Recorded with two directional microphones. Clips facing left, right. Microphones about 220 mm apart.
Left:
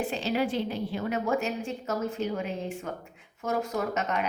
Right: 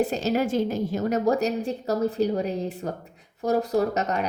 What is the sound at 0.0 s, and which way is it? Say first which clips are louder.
A woman's voice: right 5 dB; 40° right (ahead or behind).